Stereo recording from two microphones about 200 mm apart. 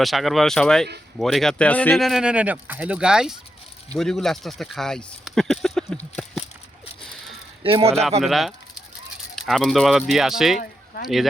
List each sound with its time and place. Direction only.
0.0 s speech: centre (ahead or behind)
7.6 s speech: 25° right (ahead or behind)
8.2 s speech: centre (ahead or behind)